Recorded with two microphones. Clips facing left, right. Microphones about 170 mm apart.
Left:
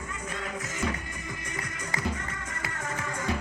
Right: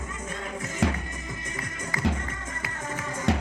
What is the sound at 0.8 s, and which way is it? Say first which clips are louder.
Music: right 5 dB; 90° right.